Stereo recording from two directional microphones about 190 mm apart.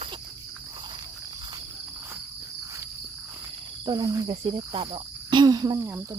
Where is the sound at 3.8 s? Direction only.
20° right (ahead or behind).